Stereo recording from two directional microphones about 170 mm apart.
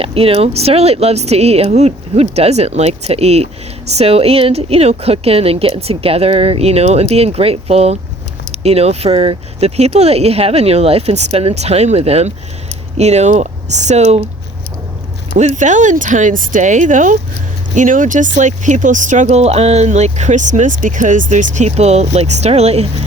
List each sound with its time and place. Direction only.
0.0 s a woman's voice: 35° right (ahead or behind)
15.3 s speech: 45° right (ahead or behind)